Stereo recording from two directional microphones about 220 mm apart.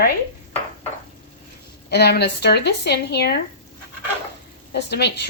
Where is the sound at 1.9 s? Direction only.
50° left (ahead or behind).